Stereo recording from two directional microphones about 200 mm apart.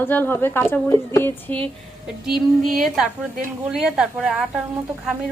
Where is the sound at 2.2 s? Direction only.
Centre (ahead or behind).